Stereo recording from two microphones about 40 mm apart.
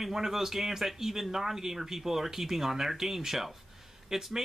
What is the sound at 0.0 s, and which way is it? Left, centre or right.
Speech, centre.